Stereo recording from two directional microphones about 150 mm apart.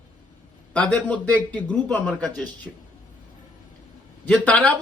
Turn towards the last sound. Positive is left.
turn(degrees=10)  # may be behind; listen again after turning